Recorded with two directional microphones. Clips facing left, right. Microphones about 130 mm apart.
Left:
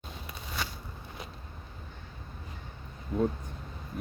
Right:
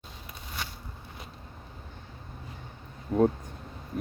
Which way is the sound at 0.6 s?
90° left.